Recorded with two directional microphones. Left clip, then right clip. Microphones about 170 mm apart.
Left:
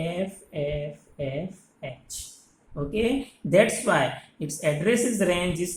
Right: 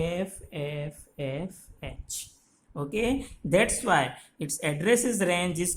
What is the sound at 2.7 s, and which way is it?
Speech, 50° right (ahead or behind).